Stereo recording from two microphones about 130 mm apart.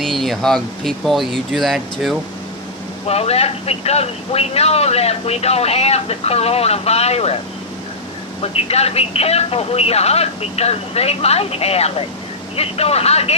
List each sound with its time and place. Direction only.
0.0 s speech: centre (ahead or behind)
3.1 s speech: 50° left (ahead or behind)
8.4 s speech: 50° left (ahead or behind)